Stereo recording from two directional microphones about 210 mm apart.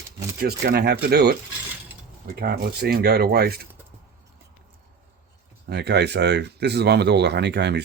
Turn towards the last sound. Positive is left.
turn(degrees=-55)  # may be behind; listen again after turning